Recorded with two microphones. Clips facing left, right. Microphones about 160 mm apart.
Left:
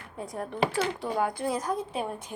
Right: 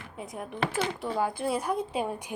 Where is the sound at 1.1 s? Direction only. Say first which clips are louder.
Left 1 dB; 25° right (ahead or behind).